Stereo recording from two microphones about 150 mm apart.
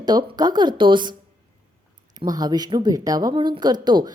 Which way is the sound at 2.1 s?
25° right (ahead or behind).